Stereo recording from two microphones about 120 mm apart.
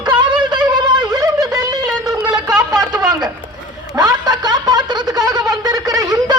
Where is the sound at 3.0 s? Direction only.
35° right (ahead or behind).